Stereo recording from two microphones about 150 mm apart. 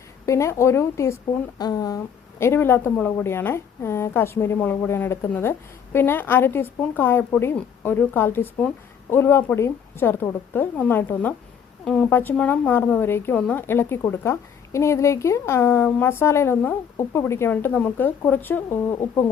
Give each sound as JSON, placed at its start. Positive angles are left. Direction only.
{"t": 0.3, "sound": "a woman's voice", "side_deg": 20}
{"t": 2.4, "sound": "a woman's voice", "side_deg": 15}